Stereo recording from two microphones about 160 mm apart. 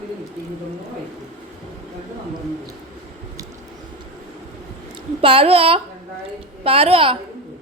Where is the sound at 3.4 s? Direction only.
20° right (ahead or behind).